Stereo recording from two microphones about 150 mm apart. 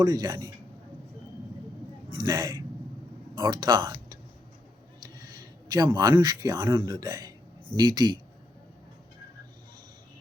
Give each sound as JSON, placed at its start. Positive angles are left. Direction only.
{"t": 0.0, "sound": "speech", "side_deg": -25}
{"t": 2.0, "sound": "speech", "side_deg": -25}
{"t": 5.1, "sound": "speech", "side_deg": -25}